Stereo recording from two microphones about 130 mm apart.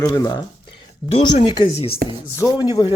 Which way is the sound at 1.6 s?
55° left (ahead or behind).